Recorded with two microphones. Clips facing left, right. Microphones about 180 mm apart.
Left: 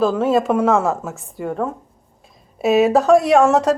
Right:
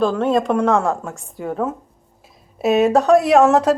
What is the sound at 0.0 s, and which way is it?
A woman's voice, 5° left (ahead or behind).